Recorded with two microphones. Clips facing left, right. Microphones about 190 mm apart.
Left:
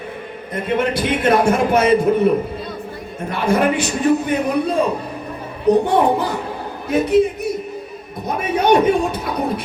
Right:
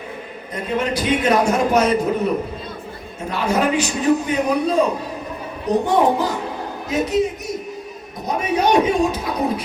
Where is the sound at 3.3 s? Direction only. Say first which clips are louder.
Left 2 dB; 55° left (ahead or behind).